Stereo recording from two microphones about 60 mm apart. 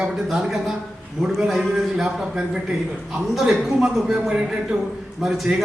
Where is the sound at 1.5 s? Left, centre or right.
Centre.